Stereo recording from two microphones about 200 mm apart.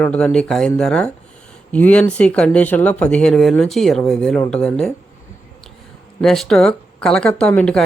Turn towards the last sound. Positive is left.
turn(degrees=5)  # may be behind; listen again after turning